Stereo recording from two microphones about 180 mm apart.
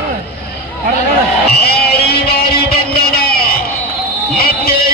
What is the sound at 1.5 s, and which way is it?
Music, 60° left (ahead or behind).